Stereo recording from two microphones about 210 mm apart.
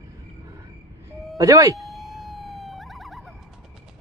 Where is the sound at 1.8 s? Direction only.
Centre (ahead or behind).